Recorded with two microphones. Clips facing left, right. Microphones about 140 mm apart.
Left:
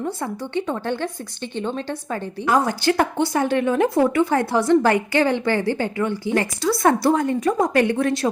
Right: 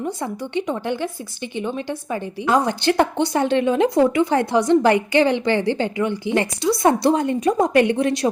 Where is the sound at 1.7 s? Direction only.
15° right (ahead or behind).